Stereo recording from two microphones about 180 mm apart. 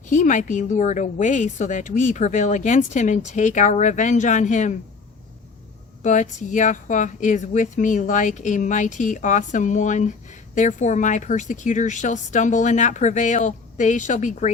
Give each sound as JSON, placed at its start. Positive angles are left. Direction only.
{"t": 0.1, "sound": "a woman's voice", "side_deg": 45}
{"t": 6.0, "sound": "a woman's voice", "side_deg": 45}